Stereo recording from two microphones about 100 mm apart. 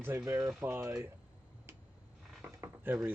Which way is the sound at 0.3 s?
30° right (ahead or behind).